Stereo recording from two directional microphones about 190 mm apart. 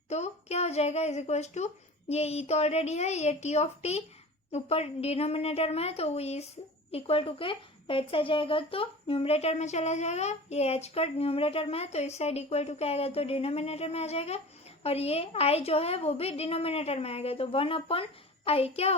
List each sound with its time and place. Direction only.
0.1 s speech: 35° left (ahead or behind)